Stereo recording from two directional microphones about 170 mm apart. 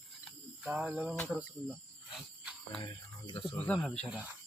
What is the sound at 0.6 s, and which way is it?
Cricket, 5° right (ahead or behind).